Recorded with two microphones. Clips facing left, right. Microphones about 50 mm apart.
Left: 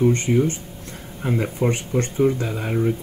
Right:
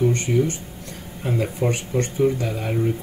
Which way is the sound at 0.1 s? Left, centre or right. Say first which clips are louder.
Left 2 dB; left.